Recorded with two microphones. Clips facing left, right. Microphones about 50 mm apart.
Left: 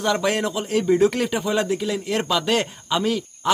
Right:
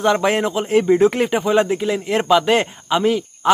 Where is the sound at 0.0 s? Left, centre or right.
Right.